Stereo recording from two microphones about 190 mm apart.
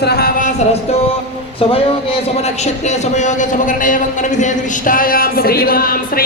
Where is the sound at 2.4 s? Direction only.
35° left (ahead or behind).